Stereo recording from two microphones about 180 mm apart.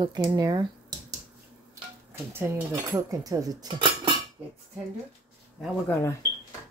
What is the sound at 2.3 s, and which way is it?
Speech, 15° right (ahead or behind).